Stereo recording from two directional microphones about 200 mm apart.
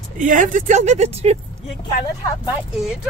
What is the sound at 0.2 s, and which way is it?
Speech, 40° right (ahead or behind).